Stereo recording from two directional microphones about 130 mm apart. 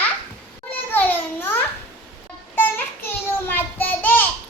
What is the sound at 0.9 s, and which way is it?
Children playing, 15° left (ahead or behind).